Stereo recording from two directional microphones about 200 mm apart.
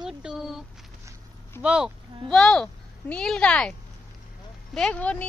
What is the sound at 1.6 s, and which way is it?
Speech, 5° right (ahead or behind).